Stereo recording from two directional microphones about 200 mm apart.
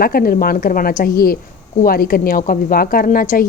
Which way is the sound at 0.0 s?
45° left (ahead or behind).